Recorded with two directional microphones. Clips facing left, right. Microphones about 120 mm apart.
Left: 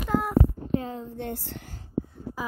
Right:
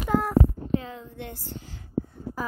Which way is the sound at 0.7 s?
35° left (ahead or behind).